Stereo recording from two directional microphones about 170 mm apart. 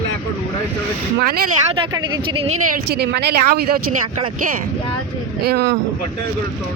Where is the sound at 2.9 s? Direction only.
75° right (ahead or behind).